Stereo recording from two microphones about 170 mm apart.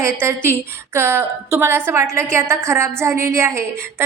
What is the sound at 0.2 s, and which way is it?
A woman's voice, 15° right (ahead or behind).